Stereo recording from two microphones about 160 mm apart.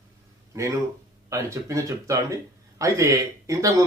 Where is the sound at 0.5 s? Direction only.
20° right (ahead or behind).